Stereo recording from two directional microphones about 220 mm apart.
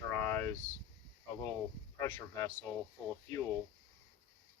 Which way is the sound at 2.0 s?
10° left (ahead or behind).